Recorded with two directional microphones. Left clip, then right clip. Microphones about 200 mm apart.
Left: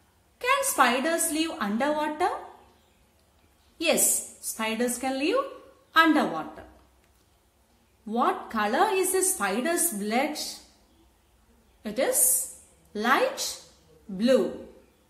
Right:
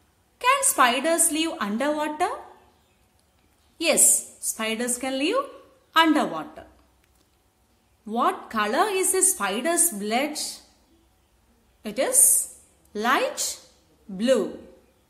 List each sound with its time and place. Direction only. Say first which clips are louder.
0.4 s a sound: right 3 dB; 30° right (ahead or behind)
1.3 s a woman's voice: right 2 dB; 30° right (ahead or behind)
3.7 s a woman's voice: right 3 dB; 30° right (ahead or behind)
8.1 s a woman's voice: right 2 dB; 30° right (ahead or behind)
11.8 s a woman's voice: right 2 dB; 30° right (ahead or behind)